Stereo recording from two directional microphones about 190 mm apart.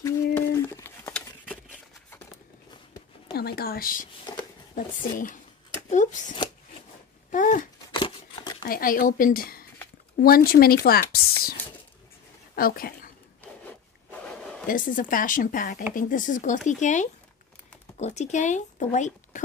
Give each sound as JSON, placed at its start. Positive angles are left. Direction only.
{"t": 0.0, "sound": "crumpling", "side_deg": 15}
{"t": 3.3, "sound": "speech", "side_deg": 55}
{"t": 7.2, "sound": "a sound", "side_deg": 45}
{"t": 7.9, "sound": "scissors", "side_deg": 25}
{"t": 8.6, "sound": "speech", "side_deg": 50}
{"t": 12.5, "sound": "speech", "side_deg": 50}
{"t": 13.4, "sound": "zipper", "side_deg": 5}
{"t": 14.7, "sound": "speech", "side_deg": 45}